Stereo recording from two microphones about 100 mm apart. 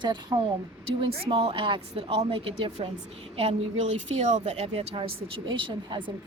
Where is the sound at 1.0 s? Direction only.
70° right (ahead or behind).